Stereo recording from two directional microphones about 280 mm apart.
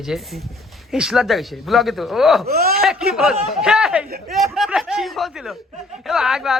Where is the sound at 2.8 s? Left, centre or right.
Centre.